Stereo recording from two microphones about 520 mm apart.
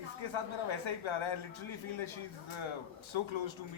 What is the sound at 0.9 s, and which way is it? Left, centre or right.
A man's voice, left.